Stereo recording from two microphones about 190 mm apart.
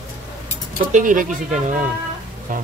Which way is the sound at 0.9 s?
40° right (ahead or behind).